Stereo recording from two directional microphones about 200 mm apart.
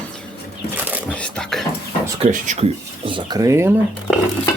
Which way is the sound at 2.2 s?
35° right (ahead or behind).